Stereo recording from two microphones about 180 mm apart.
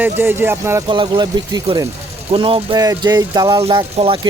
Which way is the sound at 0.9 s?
25° right (ahead or behind).